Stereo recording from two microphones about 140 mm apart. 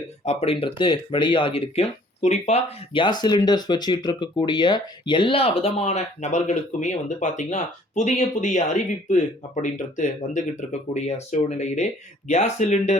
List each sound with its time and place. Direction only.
0.3 s speech: 45° left (ahead or behind)